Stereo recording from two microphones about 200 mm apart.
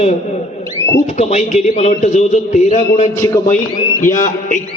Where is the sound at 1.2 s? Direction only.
35° left (ahead or behind).